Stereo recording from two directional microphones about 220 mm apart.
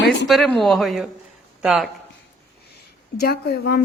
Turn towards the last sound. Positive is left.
turn(degrees=45)  # may be behind; listen again after turning